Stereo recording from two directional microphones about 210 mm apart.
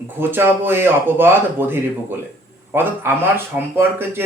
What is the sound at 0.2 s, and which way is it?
Speech, 10° right (ahead or behind).